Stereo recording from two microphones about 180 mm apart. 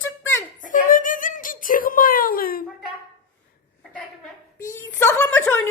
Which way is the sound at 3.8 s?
Centre (ahead or behind).